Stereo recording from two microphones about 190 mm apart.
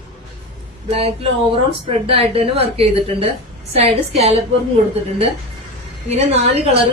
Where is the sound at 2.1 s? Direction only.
30° right (ahead or behind).